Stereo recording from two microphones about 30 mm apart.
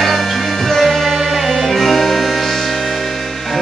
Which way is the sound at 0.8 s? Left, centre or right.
Centre.